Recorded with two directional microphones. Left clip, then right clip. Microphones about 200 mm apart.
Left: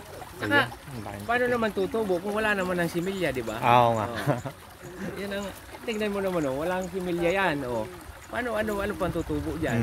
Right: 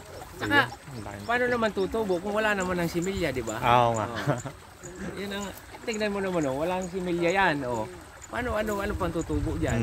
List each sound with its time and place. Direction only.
0.4 s speech: 15° right (ahead or behind)
3.6 s speech: 20° left (ahead or behind)
5.2 s speech: 15° right (ahead or behind)